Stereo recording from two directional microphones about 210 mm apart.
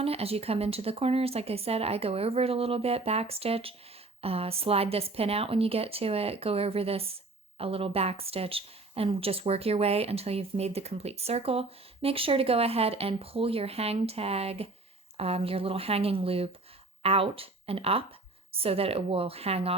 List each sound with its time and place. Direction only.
0.0 s speech: 30° right (ahead or behind)